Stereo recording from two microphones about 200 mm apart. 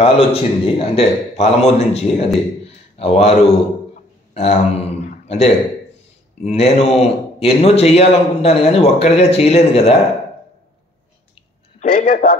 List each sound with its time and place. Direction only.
0.0 s a man's voice: 30° left (ahead or behind)
11.8 s a man's voice: 45° left (ahead or behind)